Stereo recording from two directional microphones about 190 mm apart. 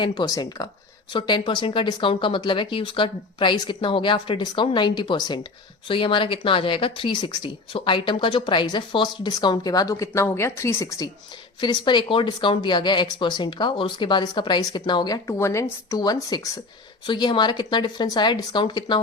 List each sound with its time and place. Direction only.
0.0 s speech: 20° left (ahead or behind)